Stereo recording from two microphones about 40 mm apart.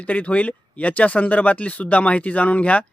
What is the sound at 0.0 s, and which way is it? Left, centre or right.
Speech, left.